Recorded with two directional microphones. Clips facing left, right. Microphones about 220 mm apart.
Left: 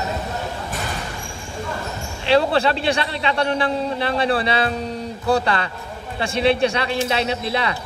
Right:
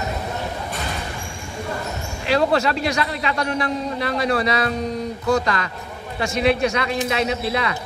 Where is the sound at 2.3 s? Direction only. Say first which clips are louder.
Left 2 dB; 30° left (ahead or behind).